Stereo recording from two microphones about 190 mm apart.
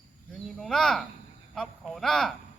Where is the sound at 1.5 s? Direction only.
Centre (ahead or behind).